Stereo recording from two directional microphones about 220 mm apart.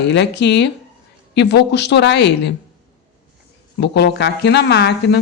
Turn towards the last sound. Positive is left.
turn(degrees=50)  # may be behind; listen again after turning